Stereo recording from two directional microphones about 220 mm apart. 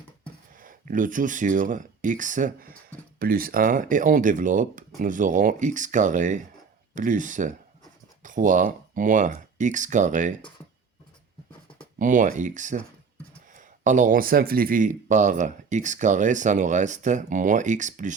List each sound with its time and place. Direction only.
0.5 s speech: 40° right (ahead or behind)
11.9 s speech: 35° right (ahead or behind)